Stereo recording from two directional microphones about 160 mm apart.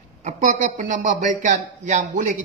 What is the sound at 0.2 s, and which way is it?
A man's voice, 55° right (ahead or behind).